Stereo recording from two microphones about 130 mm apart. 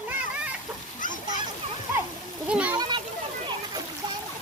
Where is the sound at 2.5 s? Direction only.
10° right (ahead or behind).